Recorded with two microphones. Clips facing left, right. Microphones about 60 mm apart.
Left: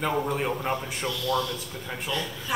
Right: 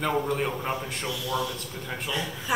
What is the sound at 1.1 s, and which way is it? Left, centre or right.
A man's voice, centre.